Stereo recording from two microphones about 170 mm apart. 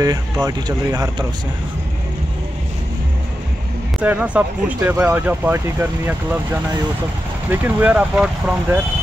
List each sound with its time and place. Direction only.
0.0 s speech: 20° right (ahead or behind)
4.0 s speech: 10° right (ahead or behind)